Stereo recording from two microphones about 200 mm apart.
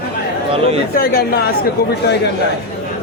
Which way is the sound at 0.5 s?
30° right (ahead or behind).